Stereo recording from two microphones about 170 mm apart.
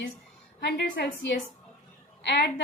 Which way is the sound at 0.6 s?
90° left.